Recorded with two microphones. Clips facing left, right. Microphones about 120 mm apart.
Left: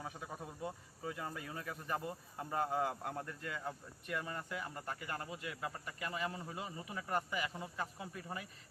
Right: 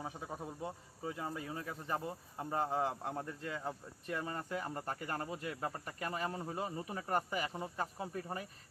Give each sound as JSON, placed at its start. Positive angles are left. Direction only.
{"t": 0.0, "sound": "a man's voice", "side_deg": -25}
{"t": 4.0, "sound": "cricket", "side_deg": -30}